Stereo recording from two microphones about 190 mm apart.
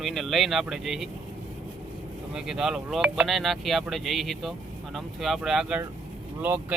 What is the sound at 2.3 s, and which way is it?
Speech, 5° right (ahead or behind).